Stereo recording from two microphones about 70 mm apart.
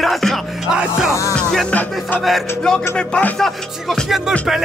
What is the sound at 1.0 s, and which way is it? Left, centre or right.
Music, left.